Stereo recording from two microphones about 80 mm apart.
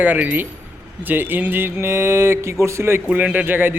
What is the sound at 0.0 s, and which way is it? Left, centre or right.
A man's voice, centre.